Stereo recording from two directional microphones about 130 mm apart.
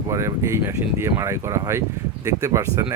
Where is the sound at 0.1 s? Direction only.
25° right (ahead or behind).